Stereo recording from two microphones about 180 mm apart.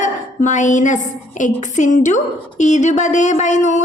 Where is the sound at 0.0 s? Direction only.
45° left (ahead or behind).